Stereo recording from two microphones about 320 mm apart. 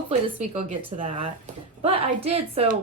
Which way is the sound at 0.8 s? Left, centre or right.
Centre.